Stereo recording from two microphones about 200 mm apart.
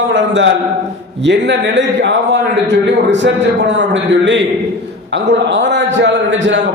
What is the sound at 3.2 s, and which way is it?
A man's voice, 65° right (ahead or behind).